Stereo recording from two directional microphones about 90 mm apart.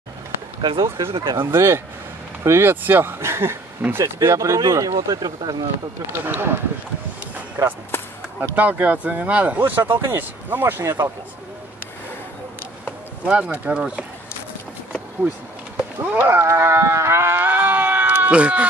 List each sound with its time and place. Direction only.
0.6 s speech: 60° right (ahead or behind)
1.4 s speech: 30° right (ahead or behind); by 5.7 s 50° right (ahead or behind)
6.1 s speech: 25° right (ahead or behind)
7.3 s music: 20° right (ahead or behind)
7.9 s a sound: 25° left (ahead or behind)
8.4 s speech: 20° right (ahead or behind)
13.2 s speech: 10° right (ahead or behind)
15.8 s cattle: 15° right (ahead or behind)